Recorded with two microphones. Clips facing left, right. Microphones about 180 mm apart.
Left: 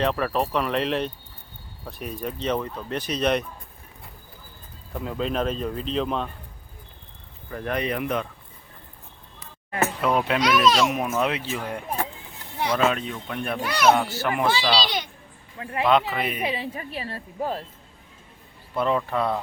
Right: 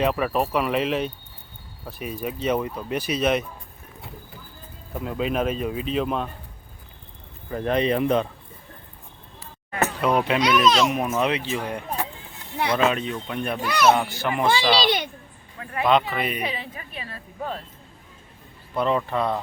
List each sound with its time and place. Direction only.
0.0 s a child's voice: 5° right (ahead or behind)
4.9 s speech: 5° right (ahead or behind)
7.5 s speech: 25° right (ahead or behind)
10.0 s a child's voice: centre (ahead or behind)
13.7 s a child's voice: 10° left (ahead or behind)
14.5 s a child's voice: 55° right (ahead or behind)
15.5 s a sound: 25° left (ahead or behind)
15.9 s a child's voice: centre (ahead or behind)
16.6 s a woman's voice: 30° left (ahead or behind)
18.7 s a child's voice: centre (ahead or behind)